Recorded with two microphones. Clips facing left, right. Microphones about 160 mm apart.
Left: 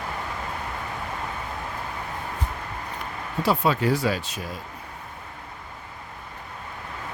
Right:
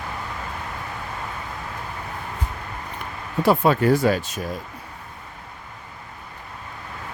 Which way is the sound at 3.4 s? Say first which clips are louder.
Right 5 dB; 50° right (ahead or behind).